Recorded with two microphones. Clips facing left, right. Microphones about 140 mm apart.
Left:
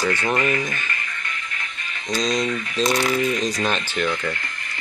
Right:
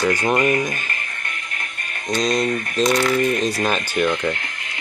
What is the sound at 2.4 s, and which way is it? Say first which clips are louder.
Coin: right 3 dB; 45° right (ahead or behind).